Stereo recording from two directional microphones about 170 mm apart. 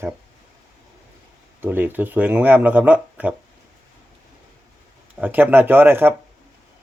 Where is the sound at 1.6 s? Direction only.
10° right (ahead or behind).